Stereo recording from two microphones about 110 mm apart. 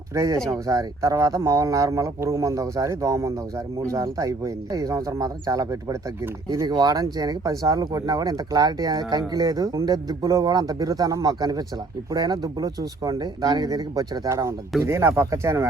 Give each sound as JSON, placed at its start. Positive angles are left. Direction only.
{"t": 0.1, "sound": "speech", "side_deg": -30}
{"t": 0.3, "sound": "speech", "side_deg": 5}
{"t": 0.7, "sound": "speech", "side_deg": -30}